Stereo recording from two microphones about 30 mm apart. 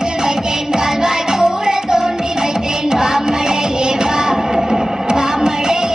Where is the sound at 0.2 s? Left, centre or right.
Centre.